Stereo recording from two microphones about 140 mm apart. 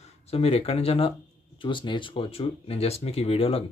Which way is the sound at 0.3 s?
45° left (ahead or behind).